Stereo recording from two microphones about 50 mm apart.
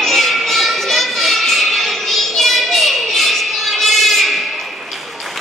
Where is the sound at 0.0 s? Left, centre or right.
Centre.